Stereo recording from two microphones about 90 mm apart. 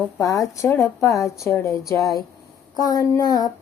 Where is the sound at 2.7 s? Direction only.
45° left (ahead or behind).